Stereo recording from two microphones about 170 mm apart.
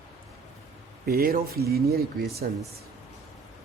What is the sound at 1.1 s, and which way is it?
Speech, 60° right (ahead or behind).